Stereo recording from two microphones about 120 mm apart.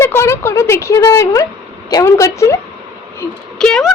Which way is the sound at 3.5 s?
5° left (ahead or behind).